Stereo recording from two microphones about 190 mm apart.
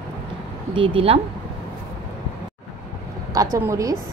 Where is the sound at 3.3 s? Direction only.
15° right (ahead or behind).